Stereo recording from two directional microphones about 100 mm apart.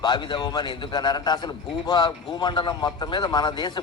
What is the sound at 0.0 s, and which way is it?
A man's voice, 50° left (ahead or behind).